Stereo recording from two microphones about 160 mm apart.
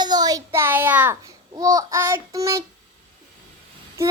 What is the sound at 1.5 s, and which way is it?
Child singing, 20° right (ahead or behind).